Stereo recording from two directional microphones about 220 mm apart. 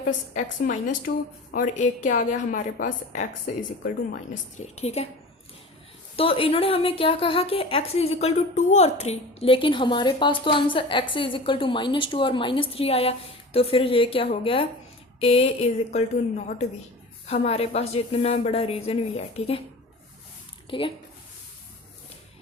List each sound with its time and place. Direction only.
0.7 s a woman's voice: 35° left (ahead or behind)
6.1 s a woman's voice: 25° left (ahead or behind)
17.2 s a woman's voice: 30° left (ahead or behind)
20.7 s a woman's voice: 25° left (ahead or behind)